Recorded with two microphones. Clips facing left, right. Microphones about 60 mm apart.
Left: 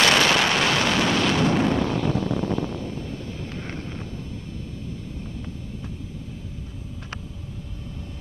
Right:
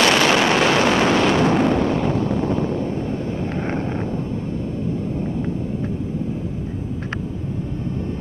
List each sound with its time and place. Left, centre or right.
0.0 s artillery fire: right